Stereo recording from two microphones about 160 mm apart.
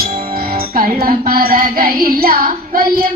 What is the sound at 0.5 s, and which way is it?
Music, 65° right (ahead or behind).